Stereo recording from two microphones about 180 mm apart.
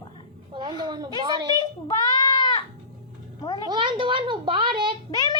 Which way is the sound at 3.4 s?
25° left (ahead or behind).